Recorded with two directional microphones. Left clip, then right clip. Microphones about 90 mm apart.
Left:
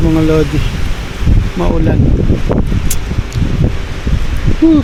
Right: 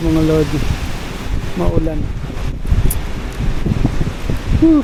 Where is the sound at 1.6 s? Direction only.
45° left (ahead or behind).